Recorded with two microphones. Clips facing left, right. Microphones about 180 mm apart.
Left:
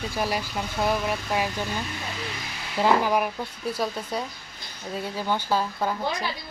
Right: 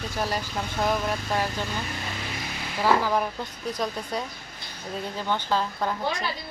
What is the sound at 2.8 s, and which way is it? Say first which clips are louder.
Speech: left 1 dB; 15° left (ahead or behind).